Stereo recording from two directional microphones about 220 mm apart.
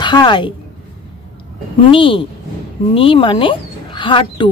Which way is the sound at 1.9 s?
25° left (ahead or behind).